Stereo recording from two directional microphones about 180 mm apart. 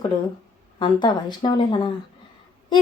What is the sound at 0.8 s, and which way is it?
A woman's voice, 25° left (ahead or behind).